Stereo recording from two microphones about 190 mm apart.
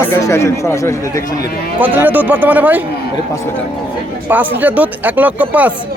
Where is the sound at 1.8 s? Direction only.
10° right (ahead or behind).